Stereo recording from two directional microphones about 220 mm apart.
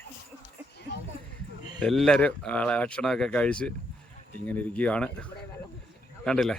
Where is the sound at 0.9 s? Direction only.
50° left (ahead or behind).